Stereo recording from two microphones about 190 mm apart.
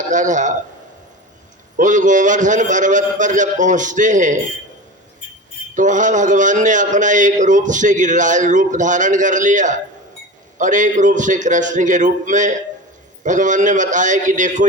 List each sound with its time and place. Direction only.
0.1 s a man's voice: 40° right (ahead or behind)
1.8 s a man's voice: 40° right (ahead or behind)
5.7 s a man's voice: 40° right (ahead or behind)